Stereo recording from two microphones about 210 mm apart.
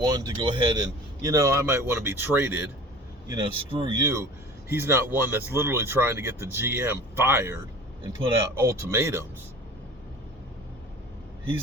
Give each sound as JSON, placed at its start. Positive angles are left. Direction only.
{"t": 0.1, "sound": "speech", "side_deg": -20}
{"t": 3.2, "sound": "speech", "side_deg": -20}
{"t": 8.6, "sound": "speech", "side_deg": -15}